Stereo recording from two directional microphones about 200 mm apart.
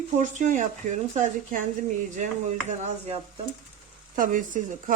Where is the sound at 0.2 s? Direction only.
40° right (ahead or behind).